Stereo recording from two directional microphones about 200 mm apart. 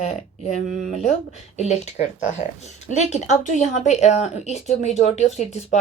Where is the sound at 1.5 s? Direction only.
35° left (ahead or behind).